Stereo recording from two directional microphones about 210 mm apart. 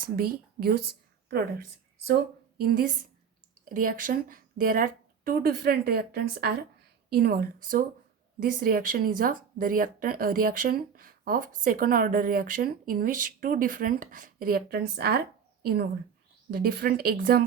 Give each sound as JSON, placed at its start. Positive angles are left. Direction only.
{"t": 0.6, "sound": "a woman's voice", "side_deg": -45}